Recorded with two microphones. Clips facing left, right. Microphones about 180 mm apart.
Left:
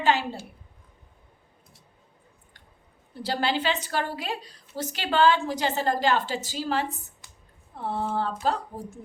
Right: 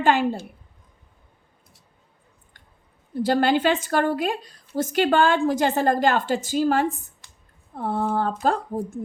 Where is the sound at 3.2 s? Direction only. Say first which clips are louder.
Right 7 dB; 50° right (ahead or behind).